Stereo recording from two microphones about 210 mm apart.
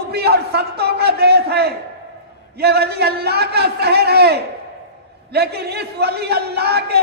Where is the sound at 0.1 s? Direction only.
50° right (ahead or behind).